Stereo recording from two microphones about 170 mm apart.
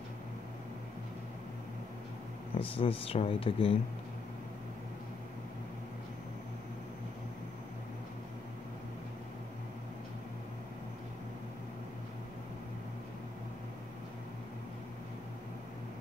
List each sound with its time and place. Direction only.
2.6 s speech: 35° left (ahead or behind)